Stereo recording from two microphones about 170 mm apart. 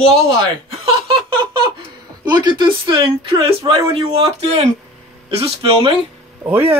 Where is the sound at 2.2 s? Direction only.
25° right (ahead or behind).